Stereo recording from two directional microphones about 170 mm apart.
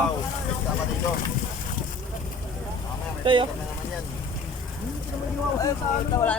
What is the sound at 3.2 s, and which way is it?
Speech, 30° right (ahead or behind).